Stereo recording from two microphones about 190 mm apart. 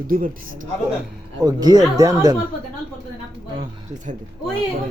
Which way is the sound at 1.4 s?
20° right (ahead or behind).